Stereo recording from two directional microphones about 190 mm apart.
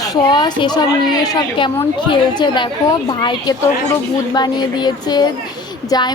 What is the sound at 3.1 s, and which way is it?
A woman's voice, 20° left (ahead or behind).